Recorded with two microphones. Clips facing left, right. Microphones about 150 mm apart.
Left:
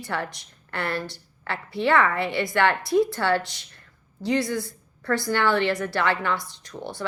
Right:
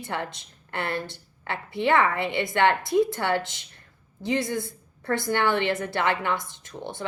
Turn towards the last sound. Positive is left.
turn(degrees=-20)  # may be behind; listen again after turning